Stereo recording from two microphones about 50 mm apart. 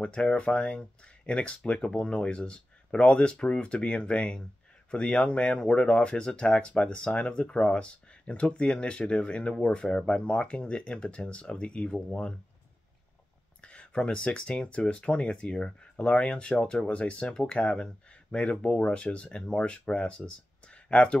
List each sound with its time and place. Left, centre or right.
0.0 s speech: left
13.6 s speech: left